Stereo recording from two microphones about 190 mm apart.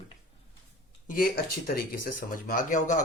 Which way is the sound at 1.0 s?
50° left (ahead or behind).